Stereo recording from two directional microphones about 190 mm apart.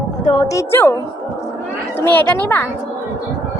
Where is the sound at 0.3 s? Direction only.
25° left (ahead or behind).